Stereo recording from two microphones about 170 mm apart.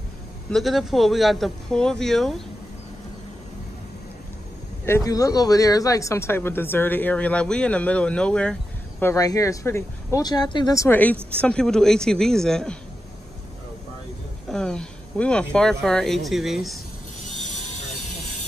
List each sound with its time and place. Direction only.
0.5 s speech: centre (ahead or behind)
4.8 s speech: 20° left (ahead or behind)
9.0 s speech: 20° left (ahead or behind); by 12.7 s 5° left (ahead or behind)
14.5 s speech: 5° left (ahead or behind)